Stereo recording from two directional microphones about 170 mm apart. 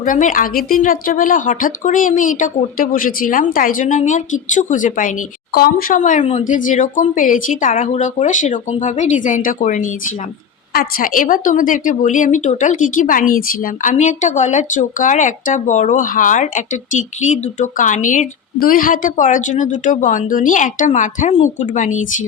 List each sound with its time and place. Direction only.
0.0 s speech: 50° left (ahead or behind)